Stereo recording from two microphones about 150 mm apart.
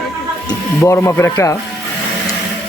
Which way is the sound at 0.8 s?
20° left (ahead or behind).